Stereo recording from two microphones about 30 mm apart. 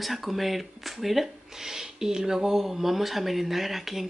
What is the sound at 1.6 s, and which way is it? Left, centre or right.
Speech, centre.